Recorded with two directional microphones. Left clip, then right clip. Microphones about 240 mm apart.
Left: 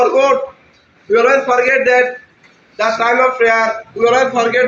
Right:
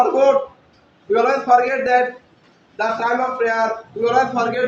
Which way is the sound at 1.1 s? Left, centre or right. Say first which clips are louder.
Left 3 dB; right.